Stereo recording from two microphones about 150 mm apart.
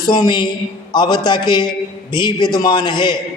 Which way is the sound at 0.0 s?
30° left (ahead or behind).